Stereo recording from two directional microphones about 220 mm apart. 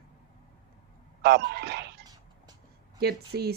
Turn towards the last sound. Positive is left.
turn(degrees=-45)  # may be behind; listen again after turning